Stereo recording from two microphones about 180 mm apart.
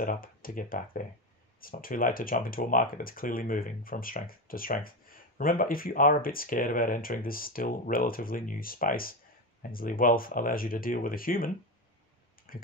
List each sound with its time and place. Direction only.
0.0 s speech: 50° left (ahead or behind)